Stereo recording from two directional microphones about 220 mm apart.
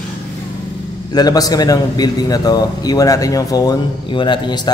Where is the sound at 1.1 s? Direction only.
15° left (ahead or behind).